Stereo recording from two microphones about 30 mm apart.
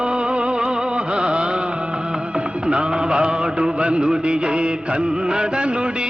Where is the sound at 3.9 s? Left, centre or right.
Right.